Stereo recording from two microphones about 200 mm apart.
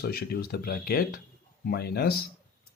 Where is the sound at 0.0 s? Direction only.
50° left (ahead or behind).